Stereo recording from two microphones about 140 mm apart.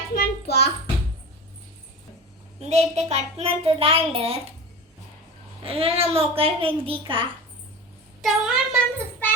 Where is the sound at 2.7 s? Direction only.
55° right (ahead or behind).